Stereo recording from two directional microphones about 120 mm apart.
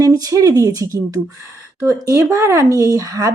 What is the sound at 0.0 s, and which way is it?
Speech, 30° right (ahead or behind).